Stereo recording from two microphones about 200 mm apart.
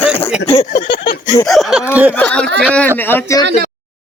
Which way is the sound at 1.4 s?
Centre (ahead or behind).